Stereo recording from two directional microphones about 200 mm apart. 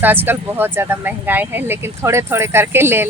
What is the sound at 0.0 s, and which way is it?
Speech, 10° right (ahead or behind).